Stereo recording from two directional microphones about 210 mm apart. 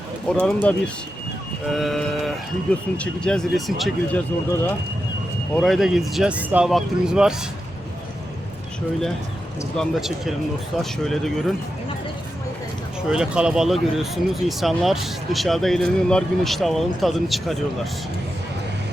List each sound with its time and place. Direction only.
0.3 s speech: 5° left (ahead or behind)
5.5 s speech: centre (ahead or behind)
9.7 s speech: centre (ahead or behind)
13.1 s speech: 5° right (ahead or behind)